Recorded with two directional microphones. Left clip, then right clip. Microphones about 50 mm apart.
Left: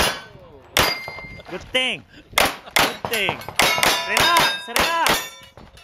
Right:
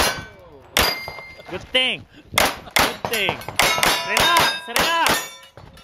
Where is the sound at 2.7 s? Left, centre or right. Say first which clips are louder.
Even; centre.